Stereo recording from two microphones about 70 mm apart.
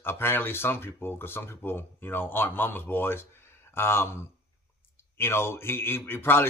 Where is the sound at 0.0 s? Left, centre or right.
Left.